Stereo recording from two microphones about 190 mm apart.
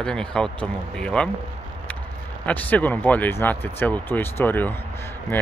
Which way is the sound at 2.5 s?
10° left (ahead or behind).